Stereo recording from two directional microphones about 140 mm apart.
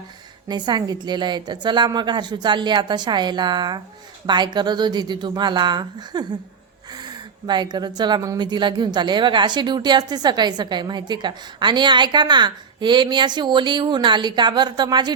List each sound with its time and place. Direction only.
0.4 s speech: 30° right (ahead or behind)